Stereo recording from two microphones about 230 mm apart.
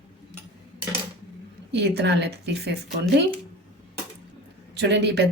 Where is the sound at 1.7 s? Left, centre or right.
Right.